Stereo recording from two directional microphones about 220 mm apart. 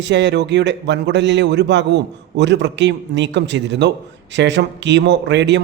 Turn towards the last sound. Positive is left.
turn(degrees=-55)  # may be behind; listen again after turning